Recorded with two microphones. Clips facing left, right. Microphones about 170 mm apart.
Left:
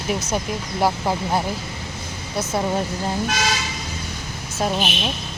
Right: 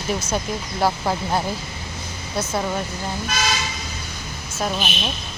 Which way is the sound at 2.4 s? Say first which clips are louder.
Left 2 dB; 20° left (ahead or behind).